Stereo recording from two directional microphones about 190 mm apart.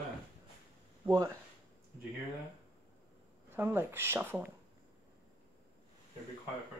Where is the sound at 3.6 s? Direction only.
10° right (ahead or behind).